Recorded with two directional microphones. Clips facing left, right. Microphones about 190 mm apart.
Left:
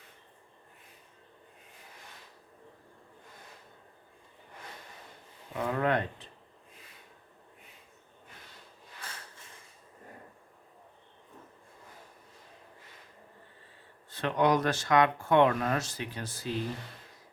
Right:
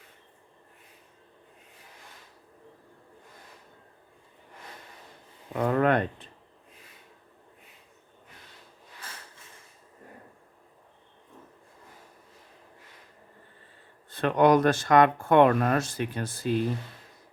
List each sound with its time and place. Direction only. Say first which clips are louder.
5.5 s speech: right 6 dB; 60° right (ahead or behind)
14.1 s speech: right 6 dB; 55° right (ahead or behind)